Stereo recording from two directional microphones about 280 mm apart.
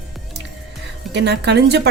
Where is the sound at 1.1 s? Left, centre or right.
Right.